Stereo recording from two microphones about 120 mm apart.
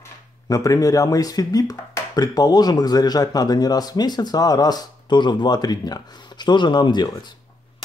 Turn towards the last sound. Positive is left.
turn(degrees=35)  # may be behind; listen again after turning